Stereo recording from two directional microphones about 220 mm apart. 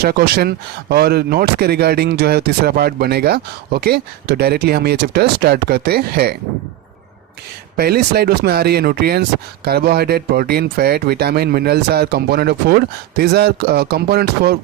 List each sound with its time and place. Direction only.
0.0 s speech: 45° right (ahead or behind)
7.8 s speech: 45° right (ahead or behind)